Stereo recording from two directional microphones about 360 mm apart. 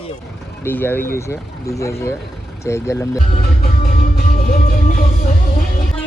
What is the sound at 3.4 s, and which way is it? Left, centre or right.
Music, left.